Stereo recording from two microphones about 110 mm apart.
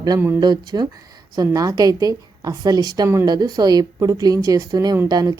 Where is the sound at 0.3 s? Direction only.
40° right (ahead or behind).